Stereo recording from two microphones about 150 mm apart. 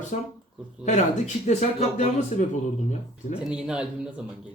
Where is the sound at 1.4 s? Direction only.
55° left (ahead or behind).